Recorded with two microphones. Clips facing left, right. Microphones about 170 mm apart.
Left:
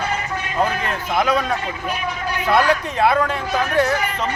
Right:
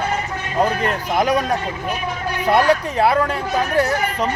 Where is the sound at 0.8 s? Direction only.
45° right (ahead or behind).